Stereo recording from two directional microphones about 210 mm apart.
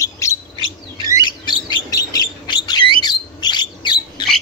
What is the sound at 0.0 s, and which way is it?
Bird, 15° left (ahead or behind).